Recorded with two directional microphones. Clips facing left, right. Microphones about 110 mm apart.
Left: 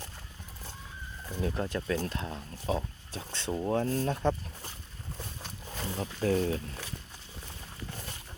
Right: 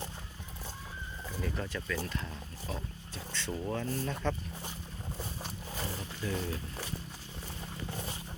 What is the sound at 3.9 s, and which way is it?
Speech, 50° left (ahead or behind).